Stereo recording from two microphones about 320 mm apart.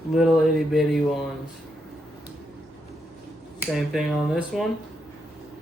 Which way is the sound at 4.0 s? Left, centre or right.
Centre.